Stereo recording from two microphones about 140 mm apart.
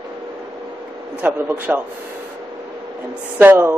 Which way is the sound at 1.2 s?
15° right (ahead or behind).